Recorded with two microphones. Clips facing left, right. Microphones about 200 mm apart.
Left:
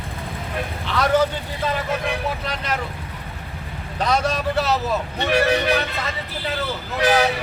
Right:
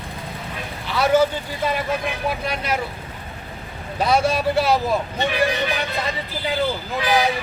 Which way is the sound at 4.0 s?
10° right (ahead or behind).